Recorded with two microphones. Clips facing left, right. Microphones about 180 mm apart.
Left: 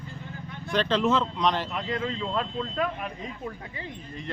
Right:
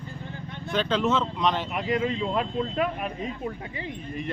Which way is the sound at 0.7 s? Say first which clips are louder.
Left 1 dB; centre (ahead or behind).